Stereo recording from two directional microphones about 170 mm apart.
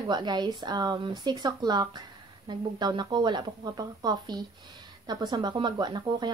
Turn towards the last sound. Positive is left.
turn(degrees=-25)  # may be behind; listen again after turning